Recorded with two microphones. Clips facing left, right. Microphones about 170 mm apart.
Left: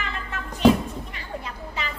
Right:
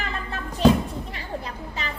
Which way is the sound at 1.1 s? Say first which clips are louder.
Right 2 dB; 35° right (ahead or behind).